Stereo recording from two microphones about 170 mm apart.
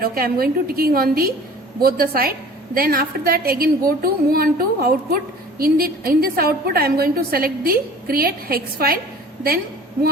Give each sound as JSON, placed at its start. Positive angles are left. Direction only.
{"t": 0.0, "sound": "a woman's voice", "side_deg": -60}